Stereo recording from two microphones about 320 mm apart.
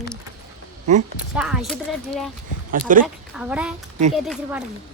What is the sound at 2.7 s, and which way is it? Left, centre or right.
Speech, right.